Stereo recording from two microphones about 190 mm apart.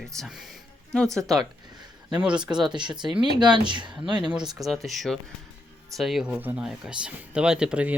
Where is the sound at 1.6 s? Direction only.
20° right (ahead or behind).